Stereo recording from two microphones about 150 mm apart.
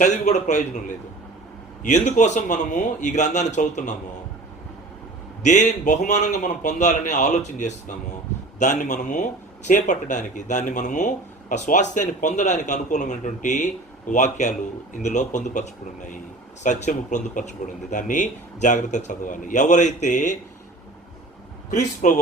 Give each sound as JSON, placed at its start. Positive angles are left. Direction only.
{"t": 0.0, "sound": "a man's voice", "side_deg": 50}
{"t": 1.8, "sound": "a man's voice", "side_deg": 55}
{"t": 5.4, "sound": "a man's voice", "side_deg": 55}
{"t": 22.0, "sound": "speech", "side_deg": 55}